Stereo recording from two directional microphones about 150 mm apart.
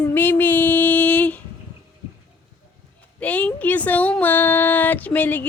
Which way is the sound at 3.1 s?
10° left (ahead or behind).